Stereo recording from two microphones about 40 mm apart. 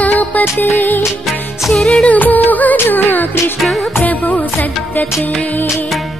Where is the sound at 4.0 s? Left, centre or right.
Left.